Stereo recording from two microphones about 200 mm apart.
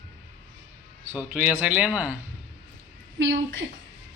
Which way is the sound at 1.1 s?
5° right (ahead or behind).